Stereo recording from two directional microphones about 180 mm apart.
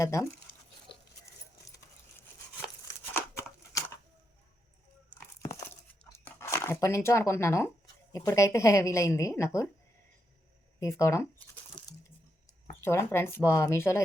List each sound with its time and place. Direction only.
0.0 s a woman's voice: 15° left (ahead or behind)
2.1 s tearing: 15° left (ahead or behind)
6.2 s a woman's voice: 15° left (ahead or behind)
10.8 s a woman's voice: 15° left (ahead or behind)
11.8 s a sound: 5° left (ahead or behind)
12.8 s a woman's voice: 15° left (ahead or behind)